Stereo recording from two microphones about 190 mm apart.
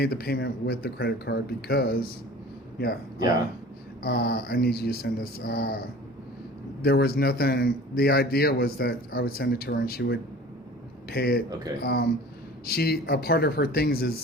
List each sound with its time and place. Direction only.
0.0 s a man's voice: 55° left (ahead or behind)
4.0 s a man's voice: 55° left (ahead or behind)
6.8 s a man's voice: 55° left (ahead or behind)